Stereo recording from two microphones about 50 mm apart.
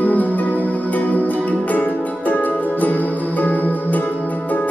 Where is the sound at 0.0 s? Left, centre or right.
Left.